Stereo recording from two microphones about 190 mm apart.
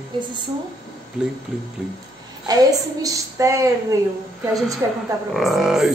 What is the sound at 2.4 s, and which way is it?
A woman's voice, 20° right (ahead or behind).